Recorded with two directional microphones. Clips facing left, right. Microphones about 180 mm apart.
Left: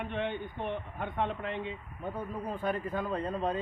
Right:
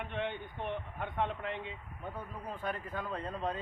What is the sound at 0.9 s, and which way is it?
Speech, 5° right (ahead or behind).